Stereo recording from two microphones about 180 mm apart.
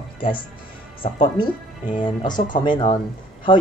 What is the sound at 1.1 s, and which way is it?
Speech, 25° left (ahead or behind).